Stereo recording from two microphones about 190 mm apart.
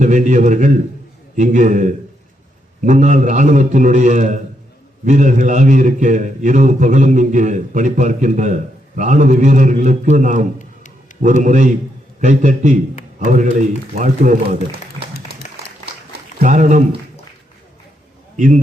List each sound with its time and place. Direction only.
0.0 s a man's voice: 40° right (ahead or behind)
14.7 s a sound: 55° right (ahead or behind)
16.4 s a man's voice: 40° right (ahead or behind)
18.3 s a man's voice: 40° right (ahead or behind)